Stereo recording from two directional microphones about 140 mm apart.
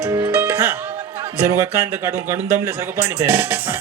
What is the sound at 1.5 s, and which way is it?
A man's voice, 15° right (ahead or behind).